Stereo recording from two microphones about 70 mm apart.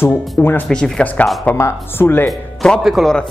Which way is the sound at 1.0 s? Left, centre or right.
Left.